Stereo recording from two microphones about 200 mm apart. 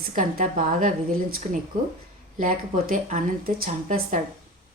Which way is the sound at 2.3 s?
45° right (ahead or behind).